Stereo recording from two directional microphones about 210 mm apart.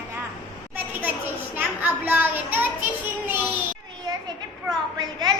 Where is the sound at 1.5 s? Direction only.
10° right (ahead or behind).